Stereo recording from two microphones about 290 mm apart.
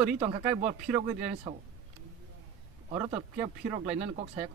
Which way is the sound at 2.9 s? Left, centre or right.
Centre.